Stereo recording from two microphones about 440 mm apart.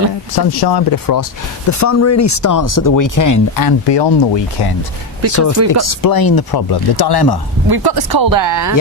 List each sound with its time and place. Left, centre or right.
0.3 s speech: left
1.8 s speech: left
5.3 s speech: left
7.7 s speech: right